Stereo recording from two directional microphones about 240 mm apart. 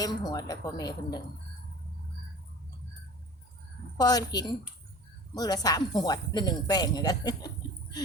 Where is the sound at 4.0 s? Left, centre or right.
Centre.